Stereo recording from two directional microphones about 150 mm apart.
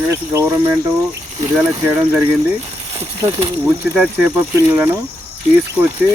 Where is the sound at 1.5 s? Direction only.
15° right (ahead or behind).